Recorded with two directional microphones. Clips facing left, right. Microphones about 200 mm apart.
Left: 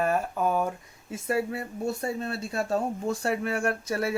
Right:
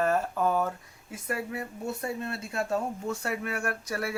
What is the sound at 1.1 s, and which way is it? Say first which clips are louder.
Speech: left 5 dB; 25° left (ahead or behind).